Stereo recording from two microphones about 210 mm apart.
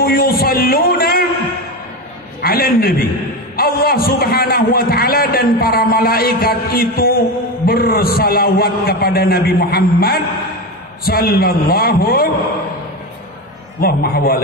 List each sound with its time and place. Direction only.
0.0 s a sound: 45° left (ahead or behind)
2.4 s a man's voice: 45° left (ahead or behind)
13.7 s a man's voice: 45° left (ahead or behind)